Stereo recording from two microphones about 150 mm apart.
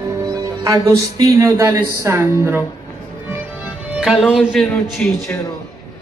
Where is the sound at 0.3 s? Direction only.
20° right (ahead or behind).